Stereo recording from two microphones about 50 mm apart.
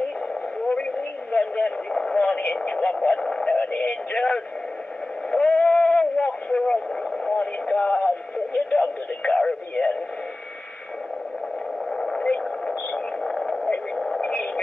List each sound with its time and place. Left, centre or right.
0.7 s radio: left
3.5 s speech: left
5.3 s radio: left
7.3 s speech: left
11.9 s radio: centre